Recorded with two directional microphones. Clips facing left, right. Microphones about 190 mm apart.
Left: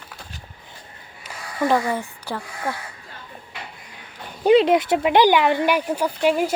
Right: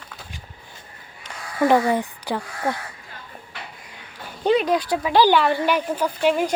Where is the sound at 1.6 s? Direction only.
15° right (ahead or behind).